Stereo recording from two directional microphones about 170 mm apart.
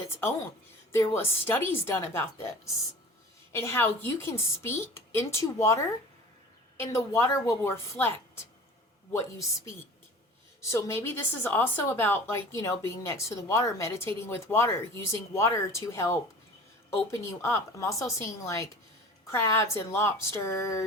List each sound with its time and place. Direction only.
0.9 s a woman's voice: 15° left (ahead or behind)